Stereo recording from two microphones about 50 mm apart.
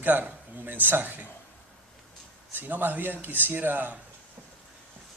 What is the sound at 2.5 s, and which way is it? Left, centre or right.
Speech, right.